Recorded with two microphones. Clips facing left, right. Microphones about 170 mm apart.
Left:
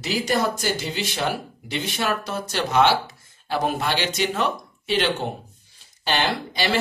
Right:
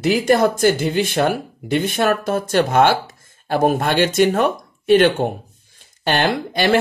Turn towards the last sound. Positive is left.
turn(degrees=-50)  # may be behind; listen again after turning